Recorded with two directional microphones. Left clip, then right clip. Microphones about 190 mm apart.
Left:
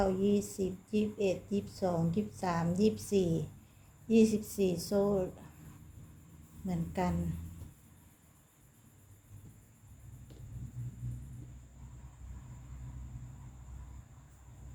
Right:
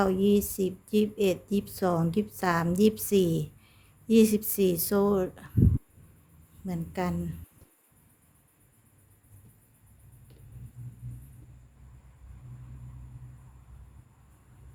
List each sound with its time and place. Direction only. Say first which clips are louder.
0.0 s a woman's voice: right 6 dB; 40° right (ahead or behind)
6.7 s speech: right 3 dB; 30° right (ahead or behind)